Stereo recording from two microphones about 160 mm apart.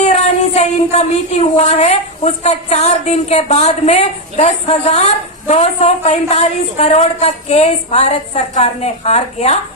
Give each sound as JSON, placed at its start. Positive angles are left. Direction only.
{"t": 0.0, "sound": "speech", "side_deg": 45}